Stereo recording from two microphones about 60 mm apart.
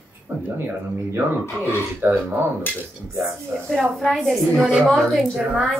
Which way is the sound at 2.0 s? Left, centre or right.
Right.